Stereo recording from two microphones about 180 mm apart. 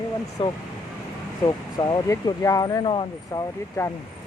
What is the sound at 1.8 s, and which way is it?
Speech, 20° left (ahead or behind).